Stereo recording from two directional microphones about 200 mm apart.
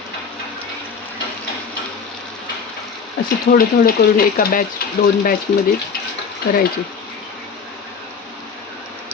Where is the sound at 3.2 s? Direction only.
50° left (ahead or behind).